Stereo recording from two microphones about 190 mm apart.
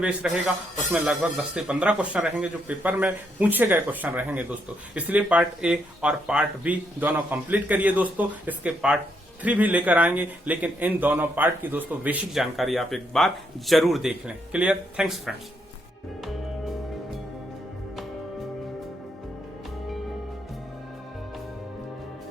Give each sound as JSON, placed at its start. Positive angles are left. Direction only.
{"t": 0.0, "sound": "a man's voice", "side_deg": -5}